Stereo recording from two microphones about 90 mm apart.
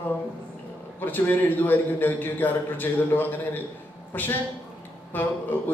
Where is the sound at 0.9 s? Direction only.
20° left (ahead or behind).